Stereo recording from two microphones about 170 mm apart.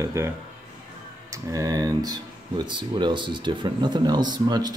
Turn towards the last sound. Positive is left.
turn(degrees=-25)  # may be behind; listen again after turning